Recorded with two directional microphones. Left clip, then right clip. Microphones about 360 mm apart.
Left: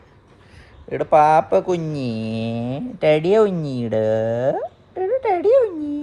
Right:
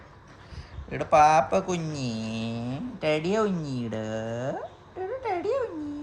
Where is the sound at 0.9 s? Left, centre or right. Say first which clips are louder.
Left 5 dB; left.